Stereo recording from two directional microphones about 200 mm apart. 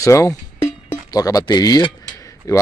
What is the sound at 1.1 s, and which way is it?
Speech, 20° left (ahead or behind).